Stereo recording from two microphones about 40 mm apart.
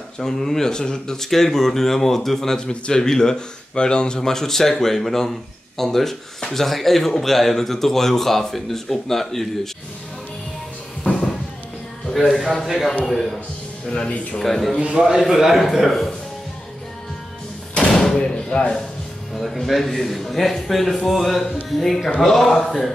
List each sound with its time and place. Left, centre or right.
0.2 s speech: centre
11.1 s music: centre
12.1 s a man's voice: centre
13.8 s speech: left
14.4 s a man's voice: centre
14.8 s a man's voice: centre
17.8 s door: centre
18.2 s speech: left
19.3 s a man's voice: centre